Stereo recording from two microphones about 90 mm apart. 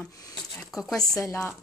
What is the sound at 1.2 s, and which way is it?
Speech, 30° left (ahead or behind).